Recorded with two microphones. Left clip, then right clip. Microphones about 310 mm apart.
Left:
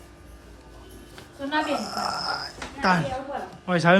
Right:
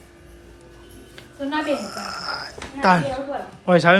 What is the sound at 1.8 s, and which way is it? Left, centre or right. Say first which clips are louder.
A woman's voice: left 2 dB; centre.